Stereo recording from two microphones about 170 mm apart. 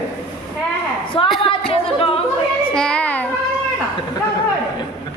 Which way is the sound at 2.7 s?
5° left (ahead or behind).